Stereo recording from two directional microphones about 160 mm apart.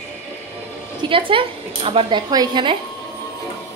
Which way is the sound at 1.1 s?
35° right (ahead or behind).